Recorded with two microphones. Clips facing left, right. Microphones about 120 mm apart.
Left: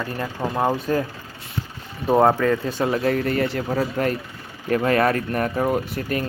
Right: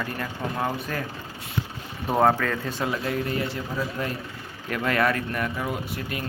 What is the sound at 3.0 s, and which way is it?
Speech, 55° left (ahead or behind).